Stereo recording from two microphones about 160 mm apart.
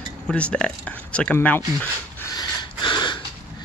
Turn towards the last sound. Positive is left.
turn(degrees=30)  # may be behind; listen again after turning